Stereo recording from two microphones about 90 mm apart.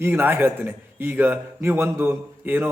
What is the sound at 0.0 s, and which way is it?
A man's voice, 25° right (ahead or behind).